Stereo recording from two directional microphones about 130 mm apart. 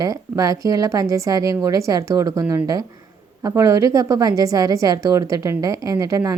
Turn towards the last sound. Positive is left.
turn(degrees=-25)  # may be behind; listen again after turning